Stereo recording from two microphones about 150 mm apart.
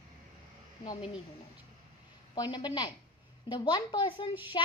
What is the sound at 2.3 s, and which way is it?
A woman's voice, 30° left (ahead or behind).